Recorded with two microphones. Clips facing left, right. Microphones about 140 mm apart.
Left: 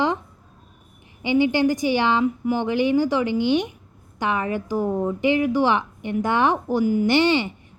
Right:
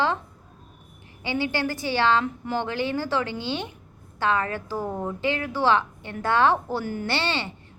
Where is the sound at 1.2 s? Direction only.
15° left (ahead or behind).